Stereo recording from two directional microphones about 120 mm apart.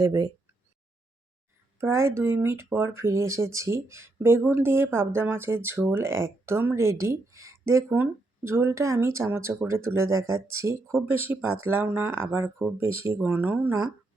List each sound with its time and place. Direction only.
0.0 s speech: 30° right (ahead or behind)
1.8 s speech: 20° right (ahead or behind)